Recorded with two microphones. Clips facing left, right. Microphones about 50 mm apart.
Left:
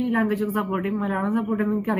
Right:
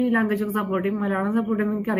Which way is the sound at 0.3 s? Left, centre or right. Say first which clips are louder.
Right 1 dB; centre.